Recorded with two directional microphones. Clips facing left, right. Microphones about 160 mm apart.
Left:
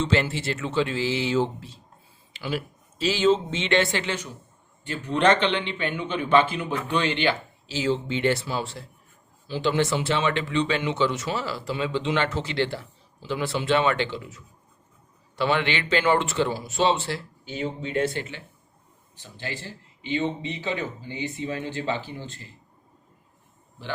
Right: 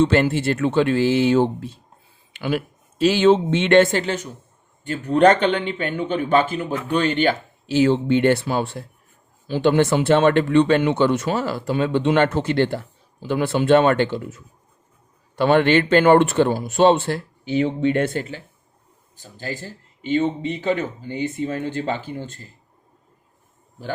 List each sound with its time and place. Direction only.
0.0 s speech: 55° right (ahead or behind)
17.4 s speech: 75° right (ahead or behind); by 22.5 s 45° right (ahead or behind)